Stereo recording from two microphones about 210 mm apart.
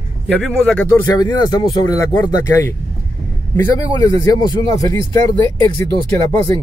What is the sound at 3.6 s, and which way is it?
Speech, 15° left (ahead or behind).